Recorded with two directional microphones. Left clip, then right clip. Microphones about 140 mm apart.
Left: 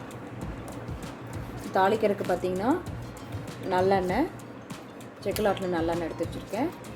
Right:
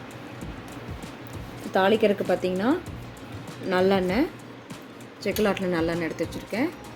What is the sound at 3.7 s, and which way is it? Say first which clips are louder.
Speech: right 2 dB; 45° right (ahead or behind).